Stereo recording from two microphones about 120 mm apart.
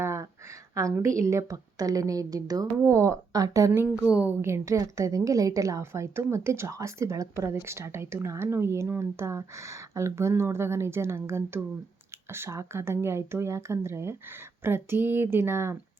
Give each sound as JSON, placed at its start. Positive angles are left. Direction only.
{"t": 0.0, "sound": "a sound", "side_deg": -25}
{"t": 0.7, "sound": "a woman's voice", "side_deg": -25}
{"t": 4.0, "sound": "a woman's voice", "side_deg": -10}